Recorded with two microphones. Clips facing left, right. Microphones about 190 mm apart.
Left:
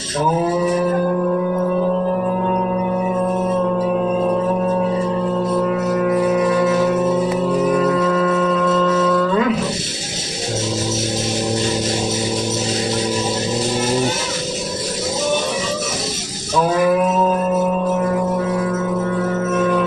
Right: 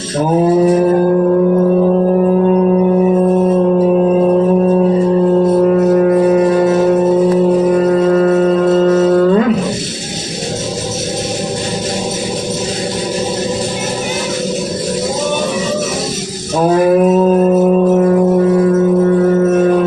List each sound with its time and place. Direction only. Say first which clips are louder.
5.6 s music: right 8 dB; 45° right (ahead or behind)
16.6 s music: right 5 dB; 45° right (ahead or behind)